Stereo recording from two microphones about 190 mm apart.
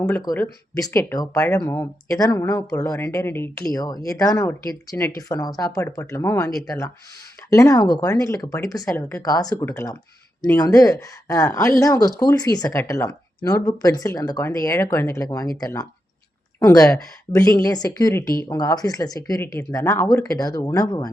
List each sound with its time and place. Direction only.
0.0 s speech: 15° left (ahead or behind)